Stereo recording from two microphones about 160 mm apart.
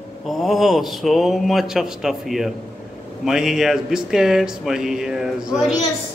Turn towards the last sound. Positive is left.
turn(degrees=0)  # may be behind; listen again after turning